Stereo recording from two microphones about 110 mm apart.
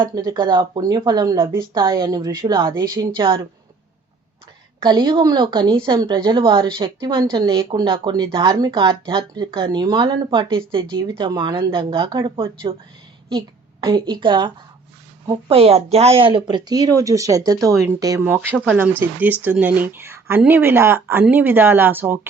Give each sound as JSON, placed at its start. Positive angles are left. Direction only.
{"t": 0.0, "sound": "speech", "side_deg": -35}
{"t": 4.8, "sound": "speech", "side_deg": -45}
{"t": 13.8, "sound": "speech", "side_deg": -45}
{"t": 15.4, "sound": "speech", "side_deg": -65}
{"t": 18.6, "sound": "speech", "side_deg": -15}